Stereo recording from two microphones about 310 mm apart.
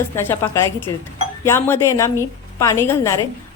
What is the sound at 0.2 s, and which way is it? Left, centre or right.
A woman's voice, centre.